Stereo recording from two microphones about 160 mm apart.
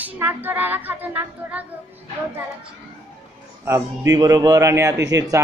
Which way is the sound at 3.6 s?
15° right (ahead or behind).